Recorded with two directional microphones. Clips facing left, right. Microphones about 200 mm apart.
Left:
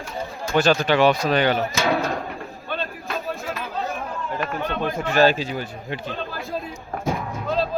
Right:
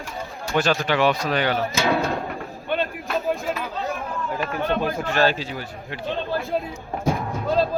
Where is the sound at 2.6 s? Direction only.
15° right (ahead or behind).